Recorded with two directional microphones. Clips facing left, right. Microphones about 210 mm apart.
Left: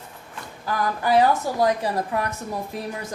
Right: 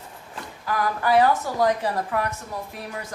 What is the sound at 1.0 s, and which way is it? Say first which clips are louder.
Speech: left 1 dB; 15° left (ahead or behind).